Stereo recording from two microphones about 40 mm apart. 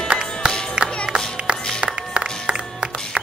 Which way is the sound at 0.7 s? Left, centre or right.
Right.